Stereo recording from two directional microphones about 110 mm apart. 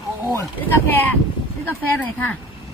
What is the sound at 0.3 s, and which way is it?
Speech, 20° left (ahead or behind).